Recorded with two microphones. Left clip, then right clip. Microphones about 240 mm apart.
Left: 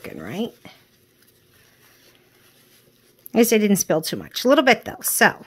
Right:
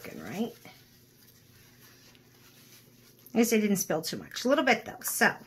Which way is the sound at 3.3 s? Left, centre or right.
Left.